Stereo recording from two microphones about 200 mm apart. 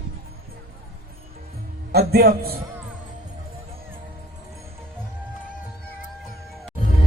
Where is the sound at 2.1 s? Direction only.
50° right (ahead or behind).